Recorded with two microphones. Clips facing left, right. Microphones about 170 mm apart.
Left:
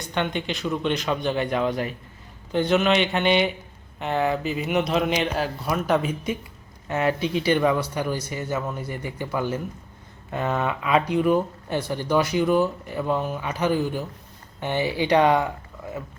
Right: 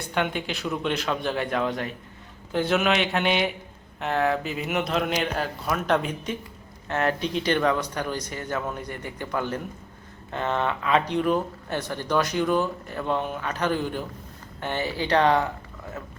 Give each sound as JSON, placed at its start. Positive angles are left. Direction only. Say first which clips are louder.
{"t": 0.1, "sound": "speech", "louder": "left 1 dB", "side_deg": -5}